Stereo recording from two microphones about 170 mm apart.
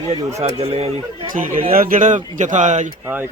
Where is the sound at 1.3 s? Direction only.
50° right (ahead or behind).